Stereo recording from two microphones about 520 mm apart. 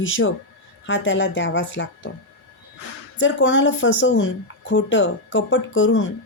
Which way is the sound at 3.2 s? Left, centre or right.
Left.